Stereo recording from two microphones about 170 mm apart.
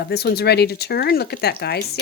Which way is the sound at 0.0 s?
70° left (ahead or behind).